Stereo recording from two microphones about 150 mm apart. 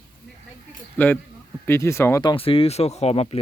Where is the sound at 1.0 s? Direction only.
10° left (ahead or behind).